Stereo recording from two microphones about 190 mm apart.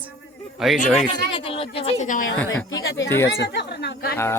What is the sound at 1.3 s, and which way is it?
Speech, 30° left (ahead or behind).